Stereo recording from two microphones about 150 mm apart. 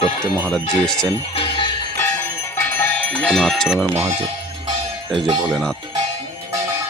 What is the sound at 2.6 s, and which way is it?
Music, 15° left (ahead or behind).